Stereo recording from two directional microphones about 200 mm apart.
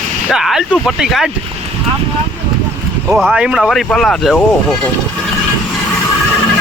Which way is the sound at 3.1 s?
Centre (ahead or behind).